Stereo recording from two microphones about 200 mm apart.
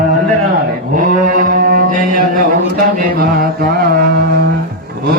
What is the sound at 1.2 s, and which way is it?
Mantra, 40° right (ahead or behind).